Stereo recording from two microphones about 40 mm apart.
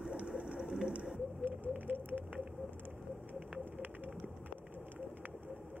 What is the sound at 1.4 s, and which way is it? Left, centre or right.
Patter, right.